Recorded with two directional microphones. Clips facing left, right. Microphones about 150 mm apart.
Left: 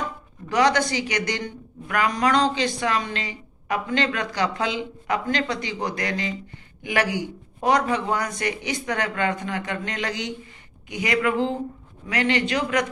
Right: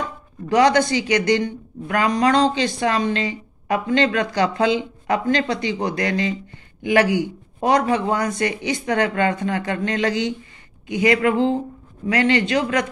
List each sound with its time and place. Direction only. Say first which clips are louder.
0.5 s speech: right 5 dB; 25° right (ahead or behind)